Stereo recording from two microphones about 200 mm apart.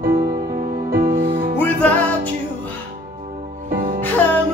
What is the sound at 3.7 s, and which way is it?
Music, 45° right (ahead or behind).